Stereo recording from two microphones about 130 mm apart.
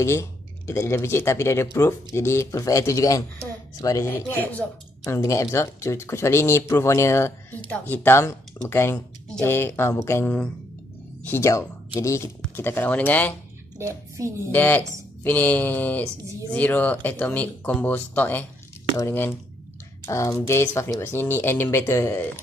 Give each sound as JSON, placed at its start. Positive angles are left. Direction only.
{"t": 0.0, "sound": "speech", "side_deg": 20}
{"t": 5.0, "sound": "speech", "side_deg": 25}
{"t": 13.7, "sound": "speech", "side_deg": -25}
{"t": 14.5, "sound": "speech", "side_deg": 15}